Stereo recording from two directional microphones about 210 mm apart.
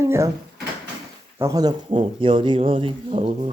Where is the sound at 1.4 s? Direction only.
15° right (ahead or behind).